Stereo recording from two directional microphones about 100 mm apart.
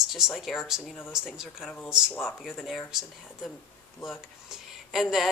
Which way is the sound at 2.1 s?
20° left (ahead or behind).